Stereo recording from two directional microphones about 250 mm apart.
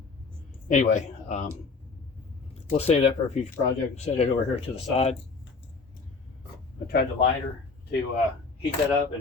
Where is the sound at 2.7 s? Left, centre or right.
Left.